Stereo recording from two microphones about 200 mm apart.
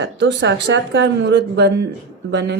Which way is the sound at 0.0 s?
60° right (ahead or behind).